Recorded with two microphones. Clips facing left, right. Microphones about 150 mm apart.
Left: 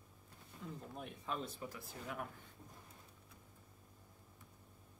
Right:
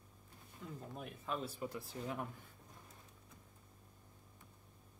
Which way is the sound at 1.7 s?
30° right (ahead or behind).